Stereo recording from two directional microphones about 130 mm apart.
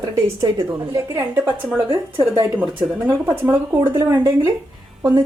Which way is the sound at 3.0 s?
25° right (ahead or behind).